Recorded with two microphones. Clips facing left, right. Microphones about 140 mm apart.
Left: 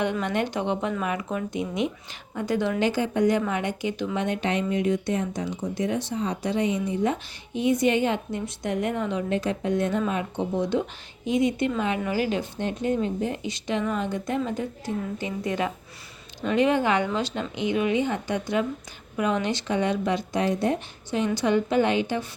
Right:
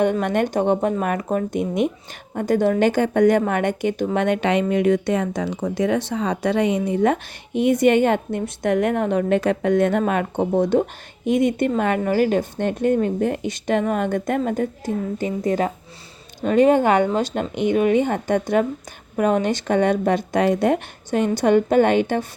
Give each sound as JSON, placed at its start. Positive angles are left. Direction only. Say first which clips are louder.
{"t": 0.0, "sound": "a woman's voice", "louder": "right 6 dB", "side_deg": -50}